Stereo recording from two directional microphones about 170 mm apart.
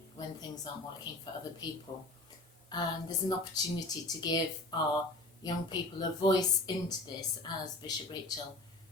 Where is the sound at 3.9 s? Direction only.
25° left (ahead or behind).